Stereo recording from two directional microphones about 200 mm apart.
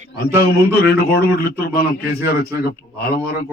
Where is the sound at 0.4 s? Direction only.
50° left (ahead or behind).